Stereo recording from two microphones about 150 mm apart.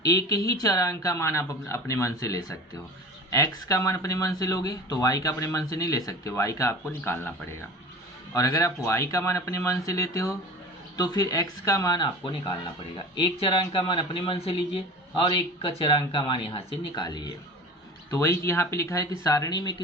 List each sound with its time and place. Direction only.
0.0 s speech: 25° left (ahead or behind)